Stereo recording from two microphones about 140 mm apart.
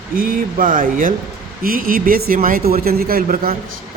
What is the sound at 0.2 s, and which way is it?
Speech, 80° right.